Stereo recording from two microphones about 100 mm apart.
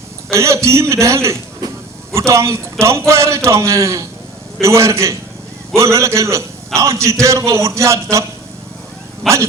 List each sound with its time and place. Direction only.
0.3 s a man's voice: 30° right (ahead or behind)
1.6 s a sound: 40° right (ahead or behind)
2.1 s a man's voice: 30° right (ahead or behind)
9.2 s speech: 5° left (ahead or behind)